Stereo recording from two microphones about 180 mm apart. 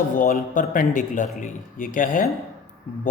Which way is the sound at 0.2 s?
50° left (ahead or behind).